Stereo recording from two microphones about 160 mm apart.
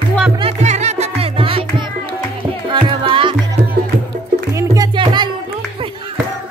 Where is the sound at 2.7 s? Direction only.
30° right (ahead or behind).